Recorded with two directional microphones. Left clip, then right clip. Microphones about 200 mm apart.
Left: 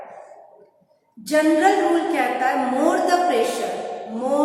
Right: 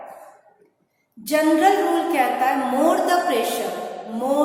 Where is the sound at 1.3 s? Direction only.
15° right (ahead or behind).